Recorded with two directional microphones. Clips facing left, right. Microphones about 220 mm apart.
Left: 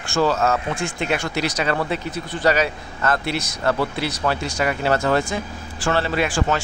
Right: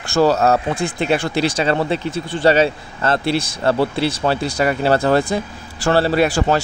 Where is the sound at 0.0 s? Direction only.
40° right (ahead or behind).